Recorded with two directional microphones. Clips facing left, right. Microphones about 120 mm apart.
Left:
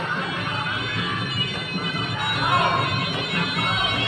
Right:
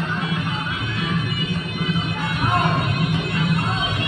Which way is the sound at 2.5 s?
70° left (ahead or behind).